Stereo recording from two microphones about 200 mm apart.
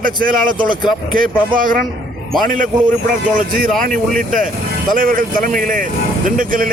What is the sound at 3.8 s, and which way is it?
Speech, 40° right (ahead or behind).